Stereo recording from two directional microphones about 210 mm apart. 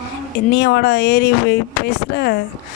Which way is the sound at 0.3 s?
50° left (ahead or behind).